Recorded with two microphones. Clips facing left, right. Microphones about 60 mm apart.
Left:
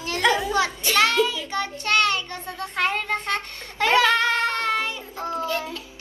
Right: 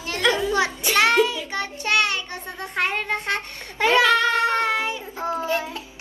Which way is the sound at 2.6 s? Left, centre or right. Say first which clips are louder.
Even; right.